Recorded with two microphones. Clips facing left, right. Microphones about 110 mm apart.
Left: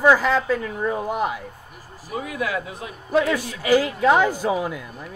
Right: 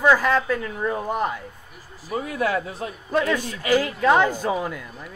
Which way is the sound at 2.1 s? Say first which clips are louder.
Right 2 dB; 40° right (ahead or behind).